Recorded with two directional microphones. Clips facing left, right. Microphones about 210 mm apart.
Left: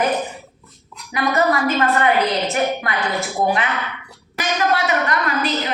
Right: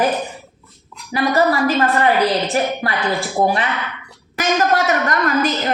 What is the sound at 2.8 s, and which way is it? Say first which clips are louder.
Speech: right 3 dB; 30° right (ahead or behind).